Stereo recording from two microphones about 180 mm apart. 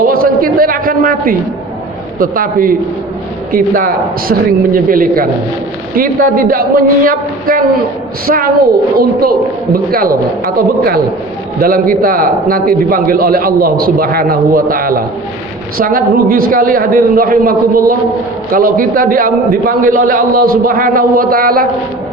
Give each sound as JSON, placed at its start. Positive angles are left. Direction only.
{"t": 0.0, "sound": "a sound", "side_deg": -55}
{"t": 2.1, "sound": "a man's voice", "side_deg": -50}
{"t": 9.7, "sound": "a man's voice", "side_deg": -55}